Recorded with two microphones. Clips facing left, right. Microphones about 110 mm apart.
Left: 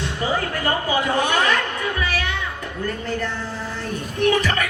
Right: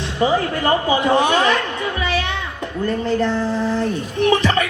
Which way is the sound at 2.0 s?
25° right (ahead or behind).